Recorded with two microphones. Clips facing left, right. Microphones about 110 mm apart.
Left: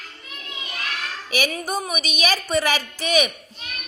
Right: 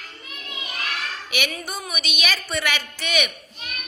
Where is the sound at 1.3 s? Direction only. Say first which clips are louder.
Left 6 dB; 35° left (ahead or behind).